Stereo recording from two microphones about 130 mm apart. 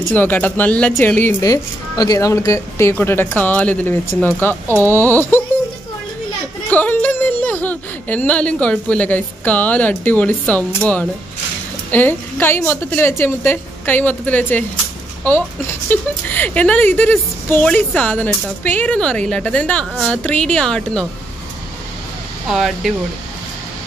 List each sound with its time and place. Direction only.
0.1 s speech: 15° left (ahead or behind)
1.4 s speech: 30° left (ahead or behind)
6.7 s speech: 15° left (ahead or behind)
15.9 s speech: 15° left (ahead or behind)
22.5 s speech: centre (ahead or behind)